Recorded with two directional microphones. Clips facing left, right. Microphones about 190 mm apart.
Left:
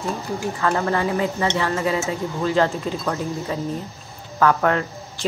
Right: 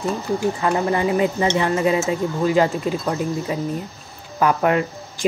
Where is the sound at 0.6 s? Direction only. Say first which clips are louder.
Right 2 dB; 15° right (ahead or behind).